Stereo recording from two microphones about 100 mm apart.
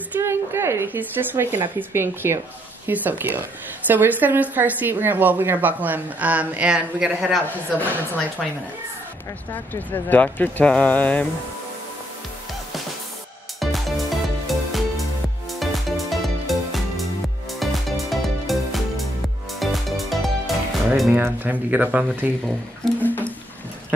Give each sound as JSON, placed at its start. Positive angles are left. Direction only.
{"t": 0.2, "sound": "a woman's voice", "side_deg": -25}
{"t": 10.0, "sound": "speech", "side_deg": 15}
{"t": 13.6, "sound": "music", "side_deg": 0}
{"t": 21.1, "sound": "a woman's voice", "side_deg": -15}
{"t": 22.9, "sound": "music", "side_deg": 20}